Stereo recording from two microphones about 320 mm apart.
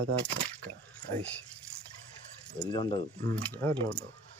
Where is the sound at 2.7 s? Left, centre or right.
Centre.